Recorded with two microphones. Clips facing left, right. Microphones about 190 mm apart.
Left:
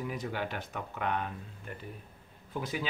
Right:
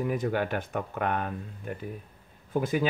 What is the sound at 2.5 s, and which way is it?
Speech, 50° right (ahead or behind).